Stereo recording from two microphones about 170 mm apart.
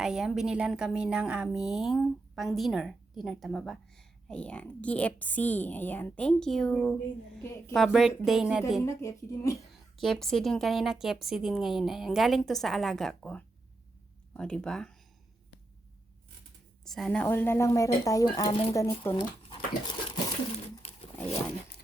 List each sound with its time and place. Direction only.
0.0 s a woman's voice: 5° right (ahead or behind)
8.8 s speech: 15° left (ahead or behind)
10.0 s a woman's voice: centre (ahead or behind)
16.8 s speech: centre (ahead or behind); by 18.5 s 20° left (ahead or behind)
19.1 s a sound: 30° left (ahead or behind)